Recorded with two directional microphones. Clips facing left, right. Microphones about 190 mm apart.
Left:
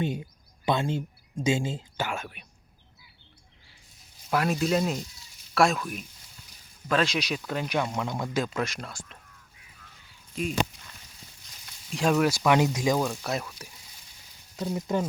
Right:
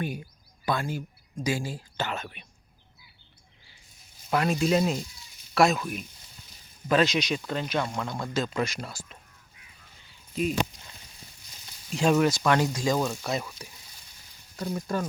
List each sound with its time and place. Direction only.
0.0 s speech: 25° left (ahead or behind)
2.0 s speech: 10° left (ahead or behind)
4.3 s speech: centre (ahead or behind)
8.5 s speech: centre (ahead or behind)
11.9 s speech: centre (ahead or behind)
12.5 s speech: 20° left (ahead or behind)
13.0 s speech: centre (ahead or behind)
14.5 s speech: 15° left (ahead or behind)